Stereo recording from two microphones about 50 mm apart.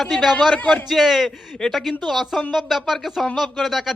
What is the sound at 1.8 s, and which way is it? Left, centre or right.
Speech, centre.